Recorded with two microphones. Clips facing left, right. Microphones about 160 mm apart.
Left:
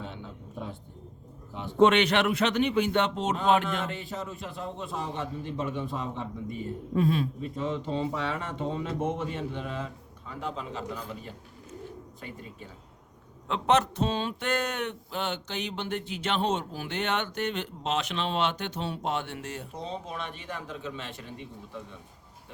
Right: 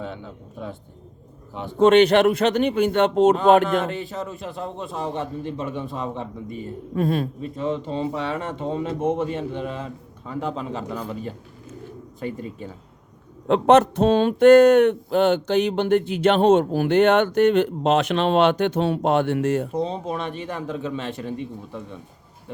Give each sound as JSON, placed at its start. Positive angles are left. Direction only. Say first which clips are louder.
{"t": 1.8, "sound": "speech", "louder": "right 7 dB", "side_deg": -40}
{"t": 3.9, "sound": "a man's voice", "louder": "right 6 dB", "side_deg": -90}
{"t": 6.9, "sound": "speech", "louder": "right 3 dB", "side_deg": -50}
{"t": 8.2, "sound": "a man's voice", "louder": "right 5 dB", "side_deg": -65}
{"t": 13.5, "sound": "a man's voice", "louder": "right 10 dB", "side_deg": -55}